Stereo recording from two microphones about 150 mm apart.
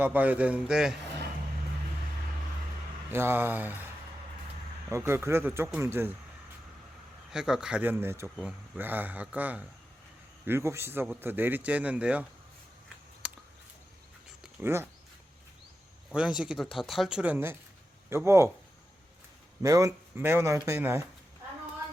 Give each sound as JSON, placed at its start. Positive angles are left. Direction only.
{"t": 0.0, "sound": "a man's voice", "side_deg": -10}
{"t": 3.1, "sound": "a man's voice", "side_deg": -15}
{"t": 4.9, "sound": "a man's voice", "side_deg": -15}
{"t": 7.3, "sound": "a man's voice", "side_deg": -5}
{"t": 8.4, "sound": "a man's voice", "side_deg": 0}
{"t": 14.6, "sound": "a man's voice", "side_deg": -15}
{"t": 16.0, "sound": "a man's voice", "side_deg": -5}
{"t": 19.6, "sound": "a man's voice", "side_deg": -20}